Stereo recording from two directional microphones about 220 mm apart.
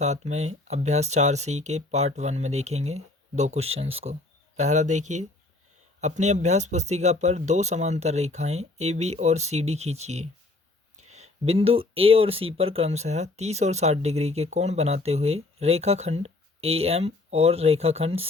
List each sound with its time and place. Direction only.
0.0 s speech: 30° right (ahead or behind)